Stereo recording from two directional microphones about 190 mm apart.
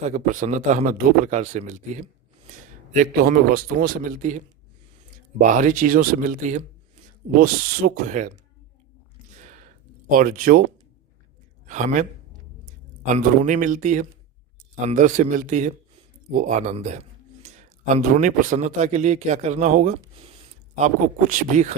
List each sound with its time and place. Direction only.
0.0 s a man's voice: 45° right (ahead or behind)
9.4 s a sound: 40° right (ahead or behind)
10.1 s a man's voice: 50° right (ahead or behind)
11.6 s a man's voice: 40° right (ahead or behind)
13.2 s speech: 40° right (ahead or behind)